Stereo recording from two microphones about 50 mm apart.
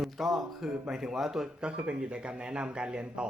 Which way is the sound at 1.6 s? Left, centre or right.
Centre.